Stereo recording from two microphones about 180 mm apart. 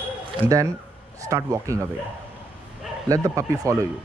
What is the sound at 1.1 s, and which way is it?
Speech, 20° right (ahead or behind).